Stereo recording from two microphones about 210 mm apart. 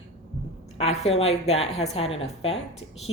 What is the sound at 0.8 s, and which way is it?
Speech, 30° left (ahead or behind).